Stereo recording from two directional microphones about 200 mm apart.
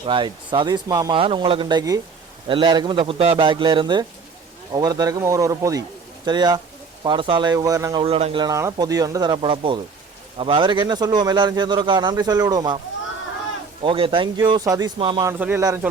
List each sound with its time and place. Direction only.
0.0 s a man's voice: 25° right (ahead or behind)
8.0 s a man's voice: 30° right (ahead or behind)
13.8 s a man's voice: 25° right (ahead or behind)
15.3 s speech: 10° right (ahead or behind)